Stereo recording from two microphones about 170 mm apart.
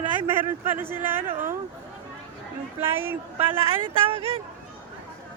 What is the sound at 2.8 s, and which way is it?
Speech, 15° right (ahead or behind).